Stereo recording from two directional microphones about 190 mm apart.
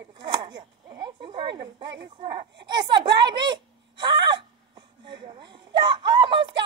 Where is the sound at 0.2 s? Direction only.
25° right (ahead or behind).